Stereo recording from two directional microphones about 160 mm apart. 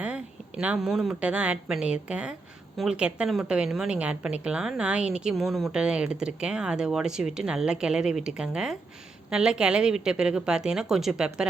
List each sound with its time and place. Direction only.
0.0 s a woman's voice: 10° right (ahead or behind)